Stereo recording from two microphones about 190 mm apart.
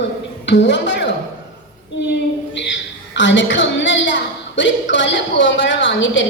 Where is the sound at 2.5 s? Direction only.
70° left (ahead or behind).